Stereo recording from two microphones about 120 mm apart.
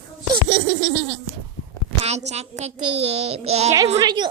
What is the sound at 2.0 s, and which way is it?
A child's voice, 65° right (ahead or behind).